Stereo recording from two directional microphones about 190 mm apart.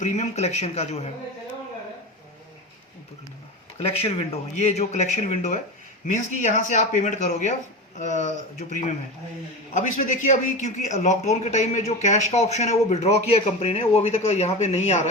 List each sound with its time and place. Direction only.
0.0 s a man's voice: 35° left (ahead or behind)
3.8 s a man's voice: 30° left (ahead or behind)